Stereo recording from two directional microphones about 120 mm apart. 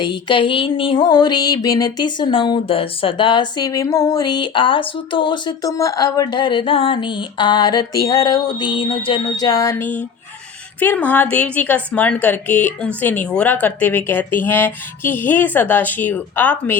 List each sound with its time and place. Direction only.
0.0 s music: 40° left (ahead or behind)
5.6 s music: 25° left (ahead or behind)
10.8 s speech: 15° left (ahead or behind)